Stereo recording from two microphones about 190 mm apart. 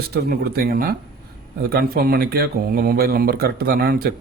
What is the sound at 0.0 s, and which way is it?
A man's voice, 55° right (ahead or behind).